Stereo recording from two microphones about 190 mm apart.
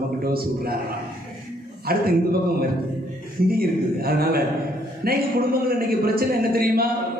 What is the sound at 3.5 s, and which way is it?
A man's voice, 50° right (ahead or behind).